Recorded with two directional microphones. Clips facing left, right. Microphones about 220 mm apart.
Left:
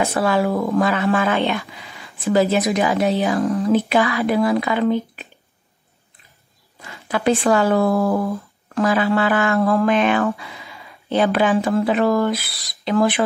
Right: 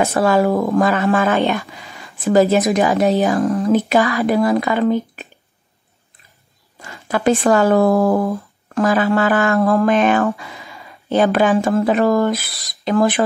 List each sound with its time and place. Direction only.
0.0 s a woman's voice: 45° right (ahead or behind)
6.8 s a sound: 45° right (ahead or behind)
7.4 s a woman's voice: 45° right (ahead or behind)